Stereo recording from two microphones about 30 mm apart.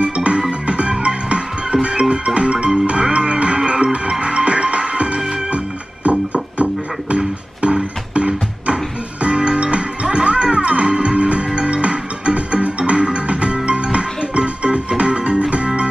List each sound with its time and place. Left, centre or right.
0.0 s music: right